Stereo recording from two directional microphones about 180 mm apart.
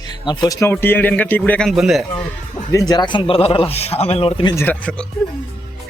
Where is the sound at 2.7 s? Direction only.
20° left (ahead or behind).